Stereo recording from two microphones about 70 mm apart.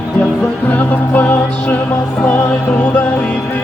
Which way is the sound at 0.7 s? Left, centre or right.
Left.